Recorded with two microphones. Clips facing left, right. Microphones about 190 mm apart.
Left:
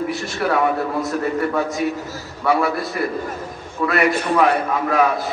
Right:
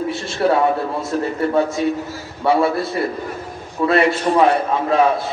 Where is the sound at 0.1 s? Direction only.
25° right (ahead or behind).